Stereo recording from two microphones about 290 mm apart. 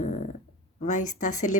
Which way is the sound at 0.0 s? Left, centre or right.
Left.